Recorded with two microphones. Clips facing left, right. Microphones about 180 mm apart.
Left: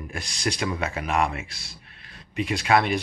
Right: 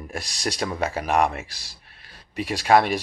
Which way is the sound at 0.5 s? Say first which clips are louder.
Right 2 dB; 35° right (ahead or behind).